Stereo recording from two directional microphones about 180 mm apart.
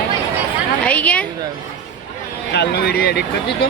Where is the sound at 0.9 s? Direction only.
10° left (ahead or behind).